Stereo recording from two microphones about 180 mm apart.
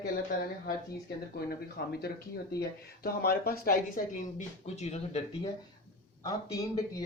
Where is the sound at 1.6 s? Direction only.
60° left (ahead or behind).